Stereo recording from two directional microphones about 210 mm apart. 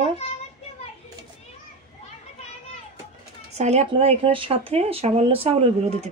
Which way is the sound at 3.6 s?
30° right (ahead or behind).